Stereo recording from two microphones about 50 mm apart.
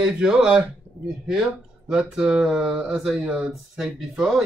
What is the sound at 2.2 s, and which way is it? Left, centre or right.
Speech, centre.